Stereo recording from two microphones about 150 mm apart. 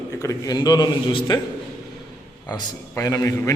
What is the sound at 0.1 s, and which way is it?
A man's voice, 20° left (ahead or behind).